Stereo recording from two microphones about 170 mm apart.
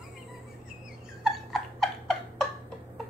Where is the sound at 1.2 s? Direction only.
Centre (ahead or behind).